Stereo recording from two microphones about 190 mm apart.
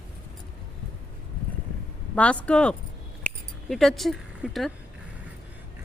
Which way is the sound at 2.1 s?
5° left (ahead or behind).